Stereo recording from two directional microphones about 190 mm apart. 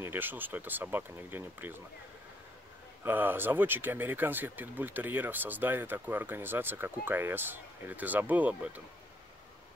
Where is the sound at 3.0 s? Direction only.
10° right (ahead or behind).